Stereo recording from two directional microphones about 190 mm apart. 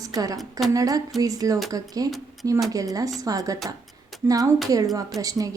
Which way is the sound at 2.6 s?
20° right (ahead or behind).